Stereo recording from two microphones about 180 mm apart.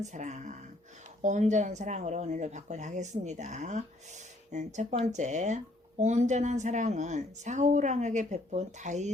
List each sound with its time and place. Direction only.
0.0 s speech: 40° right (ahead or behind)